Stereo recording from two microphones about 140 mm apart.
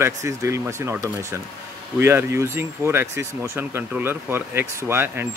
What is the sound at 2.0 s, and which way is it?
Speech, 15° right (ahead or behind).